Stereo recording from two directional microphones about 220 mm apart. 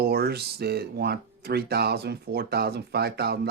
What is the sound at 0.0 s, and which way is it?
Speech, 45° right (ahead or behind).